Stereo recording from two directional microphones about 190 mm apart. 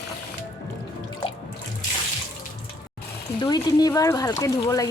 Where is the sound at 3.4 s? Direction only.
20° left (ahead or behind).